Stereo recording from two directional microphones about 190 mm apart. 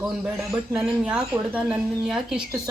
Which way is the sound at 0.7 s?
5° right (ahead or behind).